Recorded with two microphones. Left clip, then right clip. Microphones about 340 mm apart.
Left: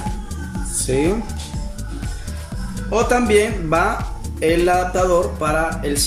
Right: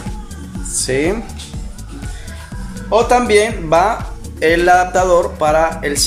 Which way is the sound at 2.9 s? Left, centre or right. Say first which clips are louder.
Right 4 dB; centre.